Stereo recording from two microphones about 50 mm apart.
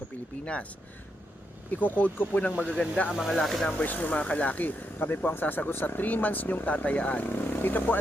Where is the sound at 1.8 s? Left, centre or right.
Left.